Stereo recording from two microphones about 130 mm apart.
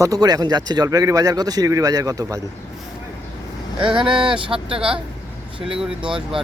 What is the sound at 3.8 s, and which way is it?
Speech, 40° right (ahead or behind).